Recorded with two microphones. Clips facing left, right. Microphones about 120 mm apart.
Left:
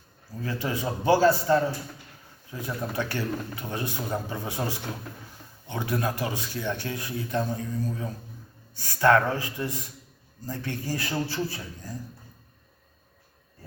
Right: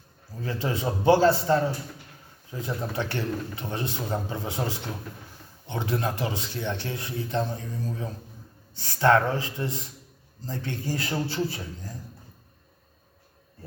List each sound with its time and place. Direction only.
0.4 s speech: 25° right (ahead or behind)